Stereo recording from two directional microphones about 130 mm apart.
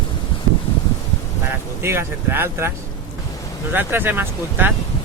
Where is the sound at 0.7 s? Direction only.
50° left (ahead or behind).